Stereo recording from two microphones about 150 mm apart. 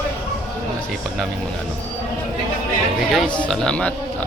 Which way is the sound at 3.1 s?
5° left (ahead or behind).